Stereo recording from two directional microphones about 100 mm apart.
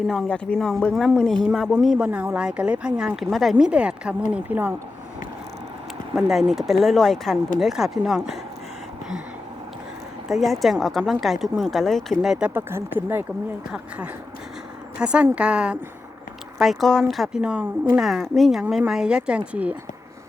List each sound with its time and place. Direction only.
0.1 s speech: 5° left (ahead or behind)
1.5 s speech: 10° right (ahead or behind)
2.0 s speech: 20° right (ahead or behind)
6.1 s speech: 5° right (ahead or behind)
10.2 s speech: centre (ahead or behind)
12.5 s speech: 20° right (ahead or behind)
14.9 s speech: 10° right (ahead or behind)
16.6 s speech: centre (ahead or behind)
17.4 s speech: 15° right (ahead or behind)
18.0 s speech: centre (ahead or behind)